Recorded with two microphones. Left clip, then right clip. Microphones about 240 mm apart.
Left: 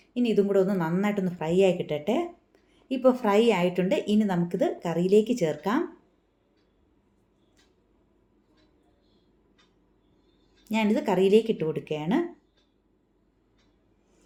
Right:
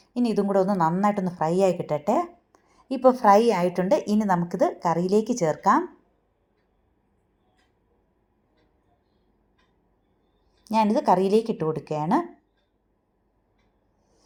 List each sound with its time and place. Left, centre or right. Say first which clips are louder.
0.0 s a woman's voice: left 1 dB; right
10.9 s speech: left 1 dB; right